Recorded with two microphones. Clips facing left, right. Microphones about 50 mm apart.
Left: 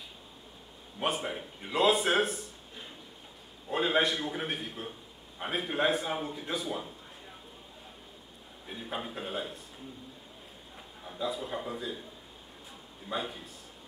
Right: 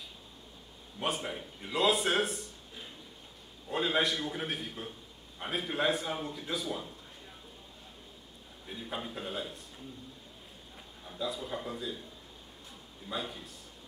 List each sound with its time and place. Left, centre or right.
0.9 s a man's voice: centre
8.6 s a man's voice: centre
11.1 s a man's voice: centre
13.1 s a man's voice: centre